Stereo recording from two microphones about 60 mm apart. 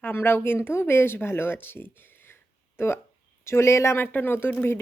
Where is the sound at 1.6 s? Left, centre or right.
Left.